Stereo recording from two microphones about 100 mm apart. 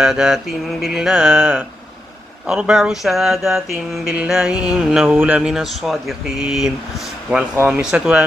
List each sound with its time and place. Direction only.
0.0 s mantra: 5° right (ahead or behind)
5.2 s mantra: 15° right (ahead or behind)
5.5 s speech: 5° right (ahead or behind)
7.8 s mantra: 10° right (ahead or behind)